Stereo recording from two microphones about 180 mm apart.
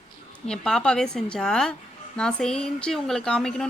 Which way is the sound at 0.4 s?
5° left (ahead or behind).